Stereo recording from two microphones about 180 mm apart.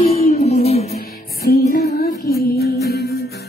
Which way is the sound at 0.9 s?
60° left (ahead or behind).